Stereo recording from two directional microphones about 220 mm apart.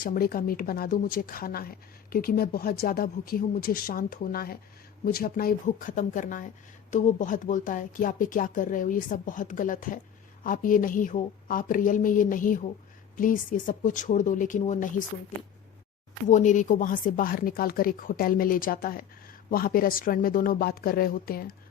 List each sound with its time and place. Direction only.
0.0 s speech: 40° left (ahead or behind)
16.3 s speech: 35° left (ahead or behind)